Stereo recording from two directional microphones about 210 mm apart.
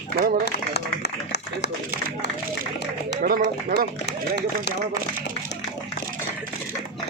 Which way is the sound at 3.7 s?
45° right (ahead or behind).